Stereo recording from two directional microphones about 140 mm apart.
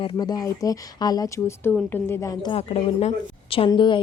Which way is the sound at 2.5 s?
45° left (ahead or behind).